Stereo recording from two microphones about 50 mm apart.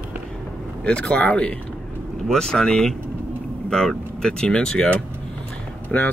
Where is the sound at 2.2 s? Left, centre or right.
Centre.